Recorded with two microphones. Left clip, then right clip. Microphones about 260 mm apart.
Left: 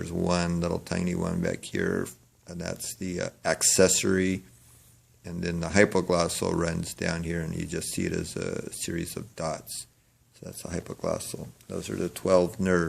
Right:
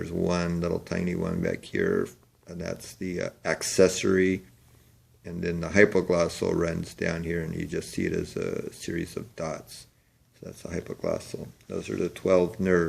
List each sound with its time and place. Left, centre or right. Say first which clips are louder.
0.0 s speech: even; left